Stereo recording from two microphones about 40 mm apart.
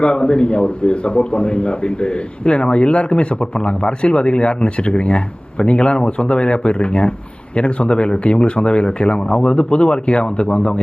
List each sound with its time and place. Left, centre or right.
0.0 s a man's voice: left